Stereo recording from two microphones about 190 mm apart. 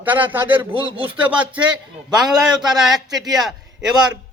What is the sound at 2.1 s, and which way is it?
A man's voice, 5° right (ahead or behind).